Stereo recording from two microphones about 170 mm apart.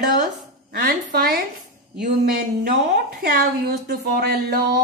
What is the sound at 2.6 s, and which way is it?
Speech, 65° right (ahead or behind).